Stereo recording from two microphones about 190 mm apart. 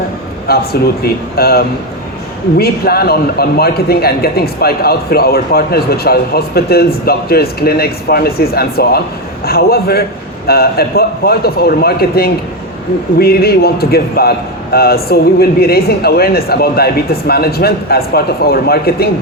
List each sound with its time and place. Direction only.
0.4 s a man's voice: 55° left (ahead or behind)